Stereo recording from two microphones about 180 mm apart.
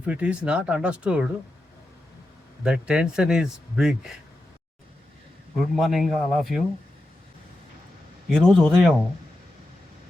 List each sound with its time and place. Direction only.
0.0 s speech: 5° right (ahead or behind)
2.6 s speech: 5° right (ahead or behind)
5.5 s speech: centre (ahead or behind)
8.3 s speech: centre (ahead or behind)